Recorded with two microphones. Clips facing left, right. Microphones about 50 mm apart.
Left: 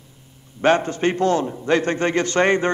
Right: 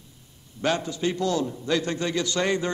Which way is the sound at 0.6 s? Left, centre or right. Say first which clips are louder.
Left 8 dB; left.